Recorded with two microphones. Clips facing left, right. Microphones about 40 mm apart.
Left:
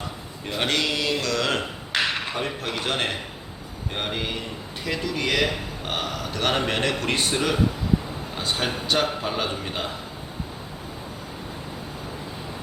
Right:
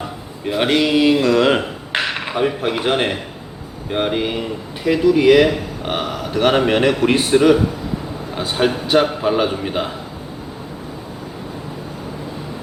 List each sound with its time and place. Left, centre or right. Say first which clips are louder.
0.4 s speech: right 8 dB; centre